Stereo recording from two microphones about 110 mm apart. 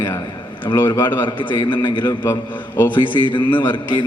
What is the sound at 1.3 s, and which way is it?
Speech, 50° left (ahead or behind).